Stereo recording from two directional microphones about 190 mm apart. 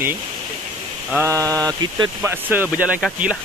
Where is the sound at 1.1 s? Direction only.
15° right (ahead or behind).